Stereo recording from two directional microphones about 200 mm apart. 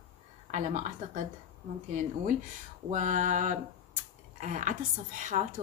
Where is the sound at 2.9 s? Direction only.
40° right (ahead or behind).